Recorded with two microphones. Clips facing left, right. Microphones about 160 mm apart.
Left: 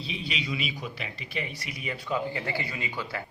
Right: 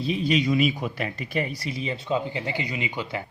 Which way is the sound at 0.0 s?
45° right (ahead or behind).